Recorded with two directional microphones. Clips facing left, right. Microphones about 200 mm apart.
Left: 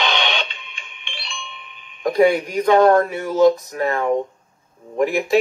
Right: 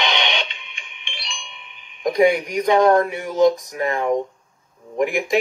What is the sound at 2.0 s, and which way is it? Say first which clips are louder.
Speech: left 1 dB; 15° right (ahead or behind).